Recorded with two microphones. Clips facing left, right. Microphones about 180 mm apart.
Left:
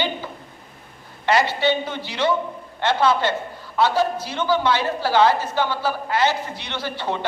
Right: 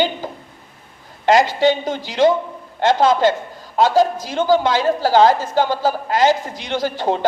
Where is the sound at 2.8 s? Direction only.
45° right (ahead or behind).